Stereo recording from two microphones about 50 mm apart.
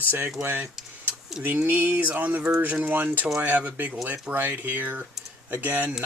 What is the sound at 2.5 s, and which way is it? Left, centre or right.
Speech, right.